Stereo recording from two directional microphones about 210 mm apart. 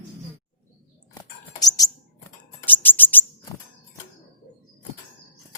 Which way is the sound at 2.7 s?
10° left (ahead or behind).